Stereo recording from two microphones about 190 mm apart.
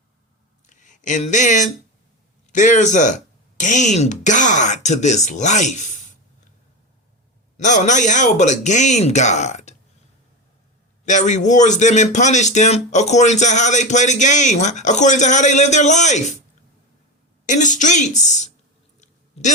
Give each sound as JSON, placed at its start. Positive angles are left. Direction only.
{"t": 0.7, "sound": "speech", "side_deg": 40}
{"t": 7.5, "sound": "speech", "side_deg": 40}
{"t": 11.0, "sound": "speech", "side_deg": 40}
{"t": 17.4, "sound": "speech", "side_deg": 40}
{"t": 18.9, "sound": "a sound", "side_deg": 40}